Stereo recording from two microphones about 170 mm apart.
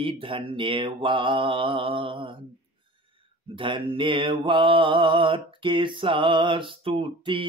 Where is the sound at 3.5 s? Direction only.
30° right (ahead or behind).